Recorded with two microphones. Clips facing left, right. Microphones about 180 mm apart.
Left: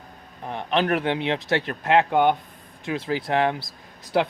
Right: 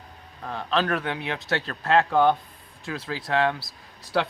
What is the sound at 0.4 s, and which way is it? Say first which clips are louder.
Speech: left 2 dB; 20° left (ahead or behind).